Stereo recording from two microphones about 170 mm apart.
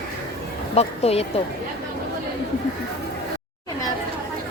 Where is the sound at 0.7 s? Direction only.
35° left (ahead or behind).